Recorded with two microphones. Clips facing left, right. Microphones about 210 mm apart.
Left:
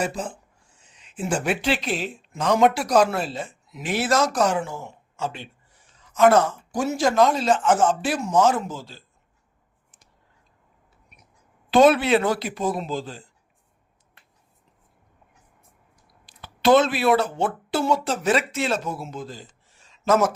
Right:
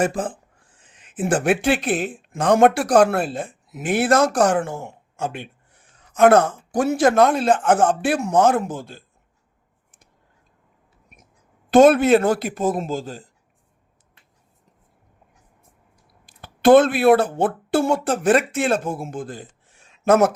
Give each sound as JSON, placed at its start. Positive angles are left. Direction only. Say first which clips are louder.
{"t": 0.0, "sound": "a man's voice", "louder": "right 5 dB", "side_deg": -50}
{"t": 11.7, "sound": "a man's voice", "louder": "right 4 dB", "side_deg": -45}
{"t": 16.4, "sound": "speech", "louder": "right 5 dB", "side_deg": -55}